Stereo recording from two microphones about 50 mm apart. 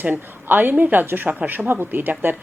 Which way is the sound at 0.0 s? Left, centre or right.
Right.